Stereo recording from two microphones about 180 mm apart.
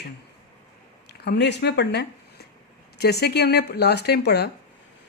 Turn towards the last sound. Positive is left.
turn(degrees=65)  # may be behind; listen again after turning